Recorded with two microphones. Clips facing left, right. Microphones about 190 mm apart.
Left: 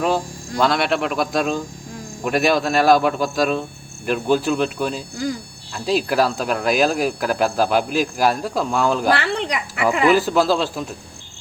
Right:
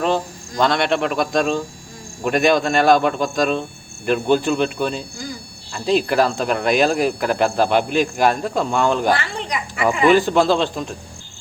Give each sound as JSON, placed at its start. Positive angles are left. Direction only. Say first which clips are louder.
{"t": 0.0, "sound": "speech", "louder": "even", "side_deg": 5}
{"t": 9.1, "sound": "a sound", "louder": "left 3 dB", "side_deg": 70}
{"t": 9.8, "sound": "speech", "louder": "right 2 dB", "side_deg": 5}